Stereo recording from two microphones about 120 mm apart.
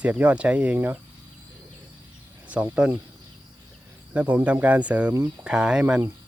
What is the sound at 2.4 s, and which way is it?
Speech, 10° right (ahead or behind).